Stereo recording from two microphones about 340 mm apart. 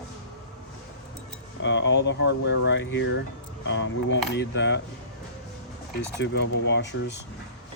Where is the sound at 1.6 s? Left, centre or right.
Left.